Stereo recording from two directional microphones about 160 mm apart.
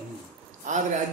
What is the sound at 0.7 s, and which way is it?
Speech, 50° right (ahead or behind).